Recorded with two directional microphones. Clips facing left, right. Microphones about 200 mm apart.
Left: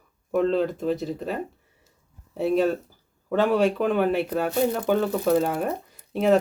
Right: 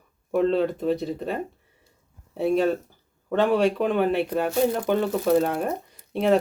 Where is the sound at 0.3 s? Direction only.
Centre (ahead or behind).